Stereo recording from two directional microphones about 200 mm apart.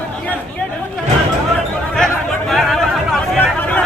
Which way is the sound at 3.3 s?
5° left (ahead or behind).